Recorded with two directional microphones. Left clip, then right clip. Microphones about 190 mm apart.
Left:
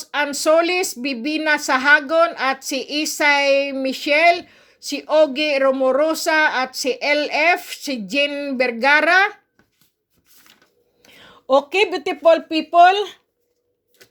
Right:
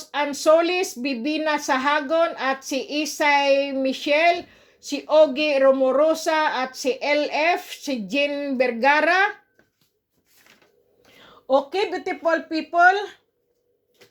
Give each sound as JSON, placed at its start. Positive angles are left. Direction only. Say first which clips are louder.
{"t": 0.0, "sound": "speech", "louder": "left 2 dB", "side_deg": 20}
{"t": 11.9, "sound": "speech", "louder": "left 7 dB", "side_deg": 40}
{"t": 12.8, "sound": "speech", "louder": "left 4 dB", "side_deg": 75}